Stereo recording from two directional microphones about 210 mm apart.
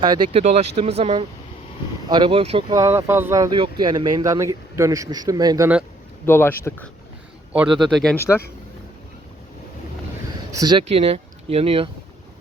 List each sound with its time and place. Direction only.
0.0 s speech: 20° right (ahead or behind)
6.2 s speech: 10° left (ahead or behind)
7.5 s a man's voice: 5° right (ahead or behind)
10.5 s speech: 20° right (ahead or behind)